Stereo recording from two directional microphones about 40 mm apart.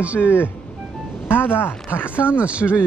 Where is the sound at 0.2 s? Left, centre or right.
Left.